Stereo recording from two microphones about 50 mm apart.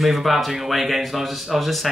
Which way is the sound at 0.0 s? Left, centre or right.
Centre.